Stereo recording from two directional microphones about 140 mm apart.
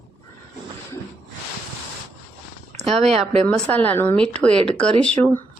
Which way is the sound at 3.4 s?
10° left (ahead or behind).